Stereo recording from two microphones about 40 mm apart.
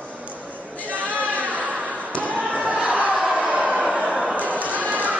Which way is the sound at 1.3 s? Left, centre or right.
Right.